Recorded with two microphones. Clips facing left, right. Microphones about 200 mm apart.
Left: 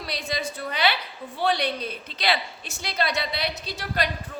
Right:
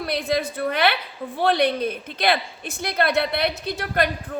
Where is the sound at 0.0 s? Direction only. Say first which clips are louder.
Right 7 dB; 55° right (ahead or behind).